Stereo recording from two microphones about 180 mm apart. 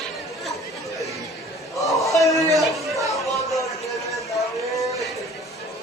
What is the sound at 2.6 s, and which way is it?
Chatter, centre (ahead or behind).